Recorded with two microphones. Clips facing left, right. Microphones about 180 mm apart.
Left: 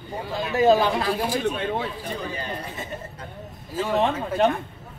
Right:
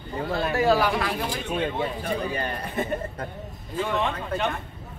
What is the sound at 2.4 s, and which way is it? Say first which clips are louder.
Speech: right 4 dB; 55° right (ahead or behind).